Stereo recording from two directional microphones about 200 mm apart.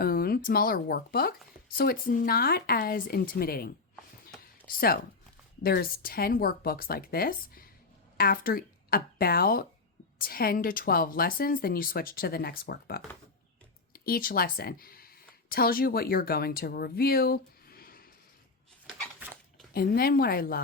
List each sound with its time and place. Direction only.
0.0 s speech: 50° left (ahead or behind)
19.7 s speech: 50° left (ahead or behind)